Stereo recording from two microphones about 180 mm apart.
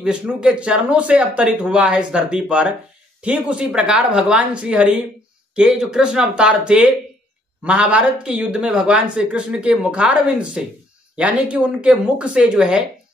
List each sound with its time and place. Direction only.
0.0 s speech: 5° right (ahead or behind)